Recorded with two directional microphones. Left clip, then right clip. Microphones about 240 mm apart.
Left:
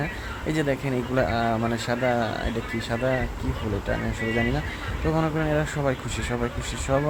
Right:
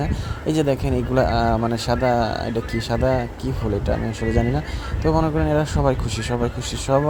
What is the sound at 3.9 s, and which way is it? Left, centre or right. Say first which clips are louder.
Speech: right 1 dB; centre.